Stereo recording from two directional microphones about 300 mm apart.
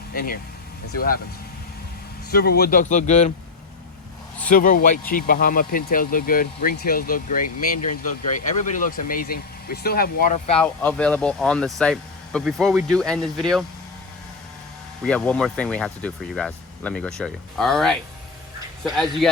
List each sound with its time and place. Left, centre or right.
0.1 s speech: left
2.3 s speech: left
4.4 s speech: left
10.6 s speech: centre
15.0 s speech: centre
19.2 s speech: centre